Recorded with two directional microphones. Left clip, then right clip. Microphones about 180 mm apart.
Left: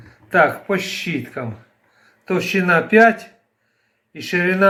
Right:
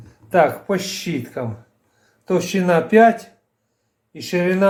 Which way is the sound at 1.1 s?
5° right (ahead or behind).